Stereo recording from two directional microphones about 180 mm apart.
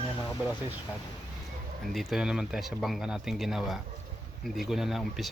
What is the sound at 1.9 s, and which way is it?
Speech, centre (ahead or behind).